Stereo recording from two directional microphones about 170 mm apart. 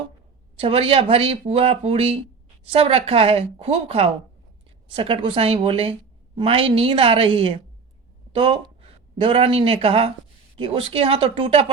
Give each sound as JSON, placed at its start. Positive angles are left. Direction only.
{"t": 0.6, "sound": "a woman's voice", "side_deg": -35}